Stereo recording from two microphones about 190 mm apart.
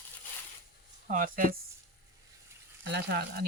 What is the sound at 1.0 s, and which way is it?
Speech, 45° right (ahead or behind).